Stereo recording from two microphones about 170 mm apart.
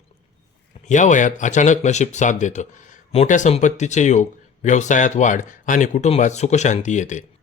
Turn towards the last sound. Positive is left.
turn(degrees=45)  # may be behind; listen again after turning